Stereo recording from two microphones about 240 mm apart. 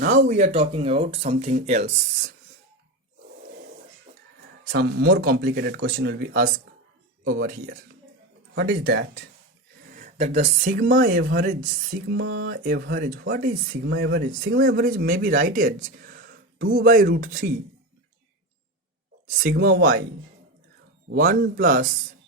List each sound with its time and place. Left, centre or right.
0.0 s speech: right
4.7 s speech: right
19.3 s speech: right
21.2 s speech: right